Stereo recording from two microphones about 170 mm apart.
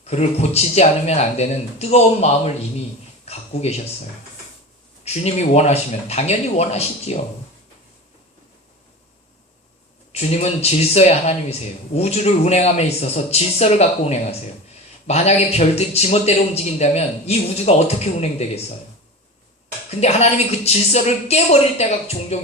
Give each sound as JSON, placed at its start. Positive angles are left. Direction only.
{"t": 0.0, "sound": "a man's voice", "side_deg": 40}
{"t": 5.0, "sound": "a man's voice", "side_deg": 40}
{"t": 10.1, "sound": "a man's voice", "side_deg": 40}
{"t": 19.9, "sound": "a man's voice", "side_deg": 40}